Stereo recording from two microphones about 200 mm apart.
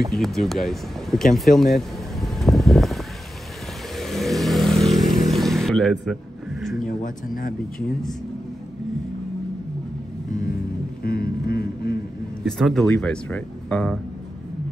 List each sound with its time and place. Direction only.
0.0 s speech: centre (ahead or behind)
3.9 s vehicle: centre (ahead or behind)
6.6 s a sound: centre (ahead or behind)
6.9 s speech: 45° left (ahead or behind)
11.0 s a sound: 50° left (ahead or behind)
12.4 s speech: centre (ahead or behind)